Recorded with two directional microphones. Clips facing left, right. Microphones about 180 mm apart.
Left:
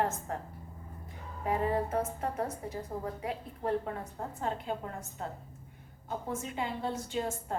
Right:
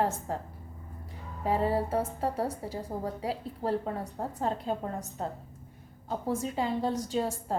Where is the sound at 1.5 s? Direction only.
30° right (ahead or behind).